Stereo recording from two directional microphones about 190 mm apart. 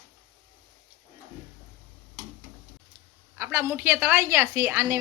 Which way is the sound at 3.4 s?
15° right (ahead or behind).